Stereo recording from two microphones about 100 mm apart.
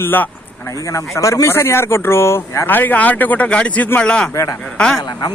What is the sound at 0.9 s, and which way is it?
Speech, 35° left (ahead or behind).